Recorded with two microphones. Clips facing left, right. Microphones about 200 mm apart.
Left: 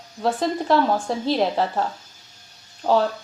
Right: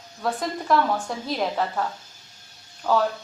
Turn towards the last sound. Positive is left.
turn(degrees=30)  # may be behind; listen again after turning